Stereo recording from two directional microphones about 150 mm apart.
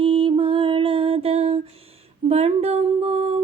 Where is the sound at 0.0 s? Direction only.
35° right (ahead or behind).